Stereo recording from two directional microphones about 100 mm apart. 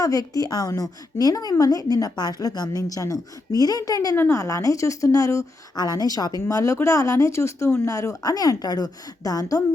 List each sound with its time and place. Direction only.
0.0 s a woman's voice: 35° left (ahead or behind)